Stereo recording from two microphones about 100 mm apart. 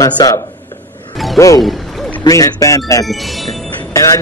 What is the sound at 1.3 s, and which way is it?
A man's voice, 35° left (ahead or behind).